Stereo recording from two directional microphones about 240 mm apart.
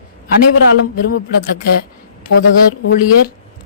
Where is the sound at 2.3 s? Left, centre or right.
Left.